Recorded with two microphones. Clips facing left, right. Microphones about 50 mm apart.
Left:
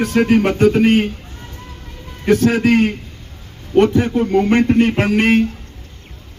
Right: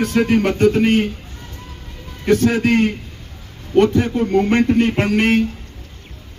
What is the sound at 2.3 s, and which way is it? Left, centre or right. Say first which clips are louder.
Speech: left 2 dB; centre.